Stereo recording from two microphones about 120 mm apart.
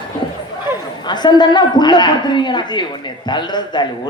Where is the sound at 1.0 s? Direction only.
35° left (ahead or behind).